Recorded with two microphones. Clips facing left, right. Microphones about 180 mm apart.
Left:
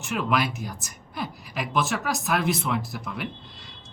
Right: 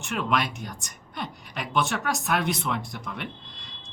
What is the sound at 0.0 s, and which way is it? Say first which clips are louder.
A woman's voice: left 1 dB; centre (ahead or behind).